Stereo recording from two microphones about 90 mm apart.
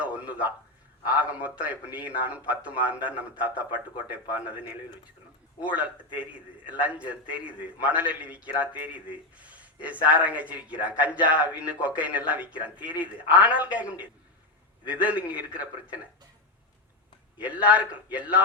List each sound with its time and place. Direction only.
0.0 s a sound: 15° right (ahead or behind)
1.0 s a man's voice: 15° right (ahead or behind)
5.7 s a man's voice: 15° right (ahead or behind)
17.4 s a man's voice: 15° right (ahead or behind)